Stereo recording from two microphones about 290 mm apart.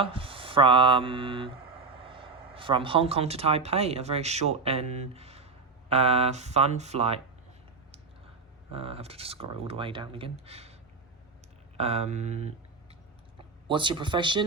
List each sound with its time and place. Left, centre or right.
0.0 s speech: centre
8.7 s speech: centre
11.8 s speech: right
13.7 s speech: centre